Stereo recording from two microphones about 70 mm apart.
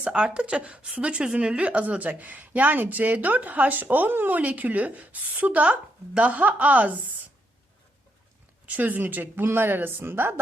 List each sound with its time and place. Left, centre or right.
0.0 s a woman's voice: centre
8.6 s a woman's voice: right